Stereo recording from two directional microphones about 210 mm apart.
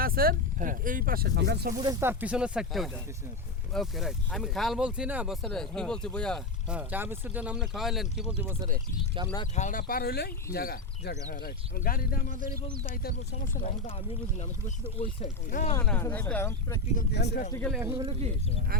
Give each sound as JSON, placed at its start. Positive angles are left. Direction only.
{"t": 0.0, "sound": "speech", "side_deg": -45}
{"t": 1.8, "sound": "speech", "side_deg": -15}
{"t": 9.6, "sound": "speech", "side_deg": 40}
{"t": 13.8, "sound": "speech", "side_deg": 25}
{"t": 15.0, "sound": "speech", "side_deg": 40}
{"t": 15.7, "sound": "speech", "side_deg": 10}
{"t": 16.9, "sound": "speech", "side_deg": 45}
{"t": 17.9, "sound": "speech", "side_deg": -25}